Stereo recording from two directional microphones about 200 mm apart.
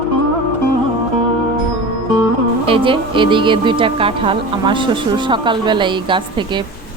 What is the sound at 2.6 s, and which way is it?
Speech, 25° right (ahead or behind).